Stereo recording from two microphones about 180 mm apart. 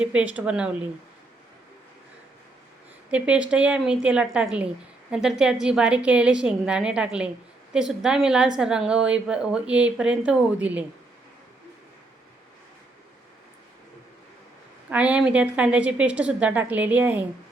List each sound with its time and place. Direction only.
0.0 s a woman's voice: 5° right (ahead or behind)
3.1 s a woman's voice: 5° right (ahead or behind)
14.8 s a woman's voice: 5° right (ahead or behind)